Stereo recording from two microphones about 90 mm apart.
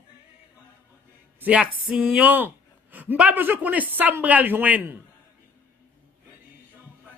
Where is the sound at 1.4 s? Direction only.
15° right (ahead or behind).